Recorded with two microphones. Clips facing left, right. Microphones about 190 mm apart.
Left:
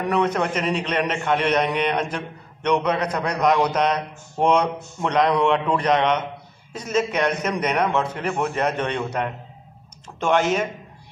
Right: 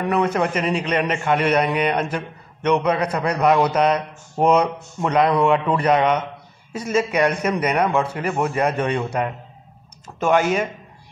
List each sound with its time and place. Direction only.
0.0 s a man's voice: 5° right (ahead or behind)